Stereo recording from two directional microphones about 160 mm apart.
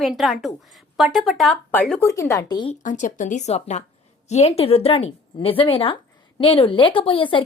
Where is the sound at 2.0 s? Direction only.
20° left (ahead or behind).